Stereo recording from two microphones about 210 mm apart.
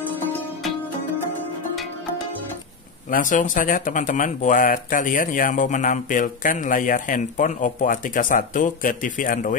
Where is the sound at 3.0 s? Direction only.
40° left (ahead or behind).